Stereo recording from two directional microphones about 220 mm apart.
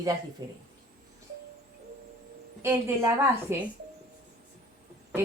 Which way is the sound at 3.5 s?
10° right (ahead or behind).